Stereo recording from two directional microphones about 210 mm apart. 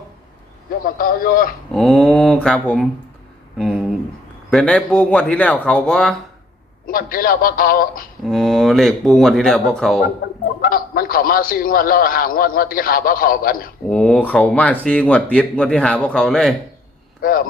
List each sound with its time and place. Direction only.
0.9 s a man's voice: 45° left (ahead or behind)
1.7 s speech: centre (ahead or behind)
3.6 s a sound: 5° left (ahead or behind)
4.5 s speech: 5° left (ahead or behind)
6.8 s a man's voice: 45° left (ahead or behind)
8.2 s speech: centre (ahead or behind)
10.4 s a man's voice: 45° left (ahead or behind)
13.9 s speech: 5° left (ahead or behind)
17.2 s a man's voice: 45° left (ahead or behind)